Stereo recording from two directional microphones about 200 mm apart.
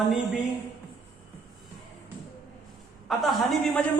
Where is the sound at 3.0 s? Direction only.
Centre (ahead or behind).